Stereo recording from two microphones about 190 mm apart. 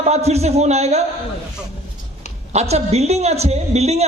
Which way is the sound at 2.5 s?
35° right (ahead or behind).